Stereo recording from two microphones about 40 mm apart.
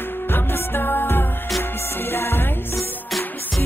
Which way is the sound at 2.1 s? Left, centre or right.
Left.